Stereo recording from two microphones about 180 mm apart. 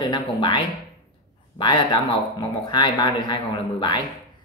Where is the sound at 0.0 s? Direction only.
25° left (ahead or behind).